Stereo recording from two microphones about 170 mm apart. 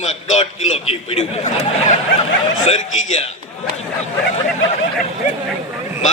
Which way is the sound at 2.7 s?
40° left (ahead or behind).